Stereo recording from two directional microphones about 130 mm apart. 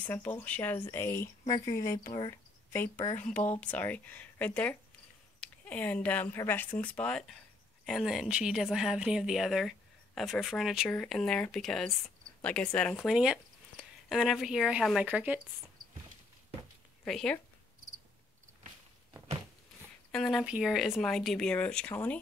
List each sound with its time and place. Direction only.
0.0 s speech: 15° left (ahead or behind); by 15.4 s 10° right (ahead or behind)
17.0 s speech: 5° left (ahead or behind)
20.1 s speech: centre (ahead or behind)